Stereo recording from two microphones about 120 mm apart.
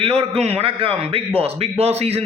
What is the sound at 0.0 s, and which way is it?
A man's voice, 60° right (ahead or behind).